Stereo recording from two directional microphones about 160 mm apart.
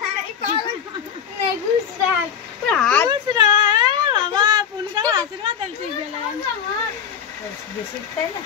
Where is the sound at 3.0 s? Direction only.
25° right (ahead or behind).